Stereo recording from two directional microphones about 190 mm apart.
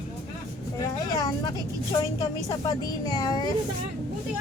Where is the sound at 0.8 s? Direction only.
20° left (ahead or behind).